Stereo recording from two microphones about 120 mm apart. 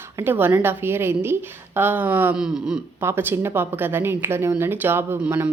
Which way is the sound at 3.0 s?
20° right (ahead or behind).